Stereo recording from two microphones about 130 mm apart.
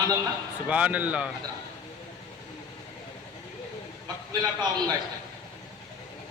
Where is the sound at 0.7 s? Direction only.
10° right (ahead or behind).